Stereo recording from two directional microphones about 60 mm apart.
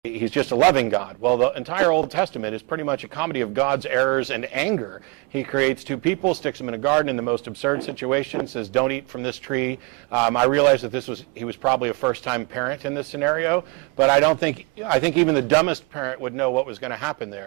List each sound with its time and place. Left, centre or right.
0.0 s speech: centre